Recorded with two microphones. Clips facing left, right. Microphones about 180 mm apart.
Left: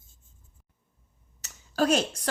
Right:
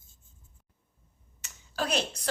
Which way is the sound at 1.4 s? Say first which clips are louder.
Left 8 dB; 40° left (ahead or behind).